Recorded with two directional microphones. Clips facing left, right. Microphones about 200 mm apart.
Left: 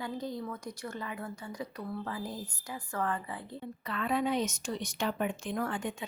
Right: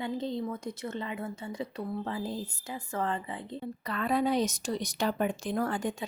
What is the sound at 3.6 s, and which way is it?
Speech, 40° right (ahead or behind).